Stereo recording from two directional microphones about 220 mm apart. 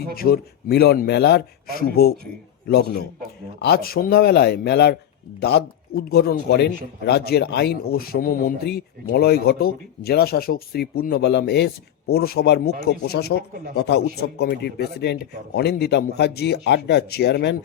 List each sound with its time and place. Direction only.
0.2 s speech: 45° left (ahead or behind)